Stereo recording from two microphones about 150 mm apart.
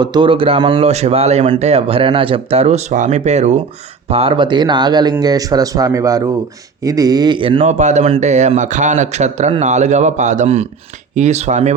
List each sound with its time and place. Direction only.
0.0 s speech: 30° right (ahead or behind); by 3.6 s 50° right (ahead or behind)
4.1 s speech: 35° right (ahead or behind)
7.6 s speech: 50° right (ahead or behind)